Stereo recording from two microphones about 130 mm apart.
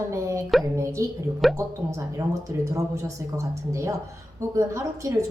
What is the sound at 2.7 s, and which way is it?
A woman's voice, 25° right (ahead or behind).